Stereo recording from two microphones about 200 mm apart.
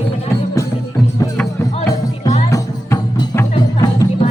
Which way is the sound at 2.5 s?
15° left (ahead or behind).